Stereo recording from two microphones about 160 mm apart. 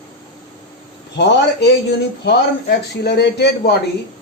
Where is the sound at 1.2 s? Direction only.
90° left.